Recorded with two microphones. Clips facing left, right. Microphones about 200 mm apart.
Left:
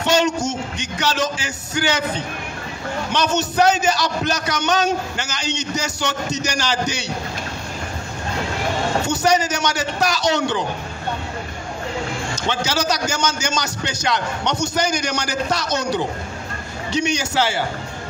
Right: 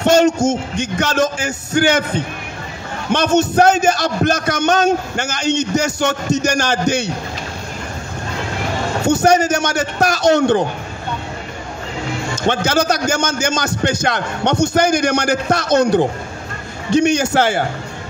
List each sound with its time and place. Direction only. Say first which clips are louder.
0.0 s a man's voice: right 6 dB; 50° right (ahead or behind)
9.0 s a man's voice: right 8 dB; 50° right (ahead or behind)
12.4 s a man's voice: right 6 dB; 50° right (ahead or behind)